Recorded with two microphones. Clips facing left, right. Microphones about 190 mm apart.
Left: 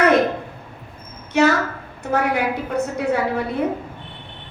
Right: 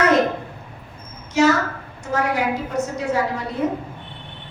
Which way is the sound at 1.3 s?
60° left (ahead or behind).